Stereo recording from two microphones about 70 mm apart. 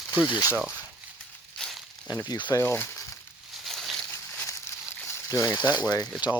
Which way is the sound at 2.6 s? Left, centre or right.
Left.